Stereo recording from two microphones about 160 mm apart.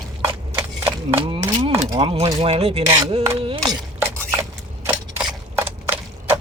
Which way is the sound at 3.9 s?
10° right (ahead or behind).